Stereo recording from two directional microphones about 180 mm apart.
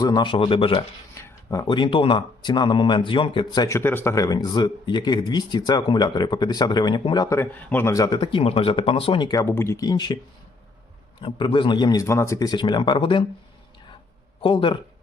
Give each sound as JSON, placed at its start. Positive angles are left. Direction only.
{"t": 0.0, "sound": "speech", "side_deg": 25}
{"t": 1.1, "sound": "speech", "side_deg": 15}
{"t": 11.2, "sound": "speech", "side_deg": 25}
{"t": 14.4, "sound": "speech", "side_deg": 30}